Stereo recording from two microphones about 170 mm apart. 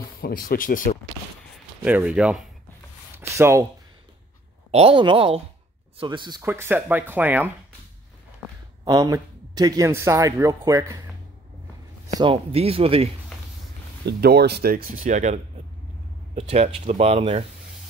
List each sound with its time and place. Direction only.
0.2 s speech: 60° left (ahead or behind)
1.9 s speech: 10° right (ahead or behind)
3.2 s a sound: 15° right (ahead or behind)
4.6 s speech: 35° right (ahead or behind)
6.4 s speech: 15° right (ahead or behind)
8.8 s speech: 25° right (ahead or behind)
12.2 s speech: 35° right (ahead or behind)
14.0 s speech: 70° right (ahead or behind); by 17.5 s 35° right (ahead or behind)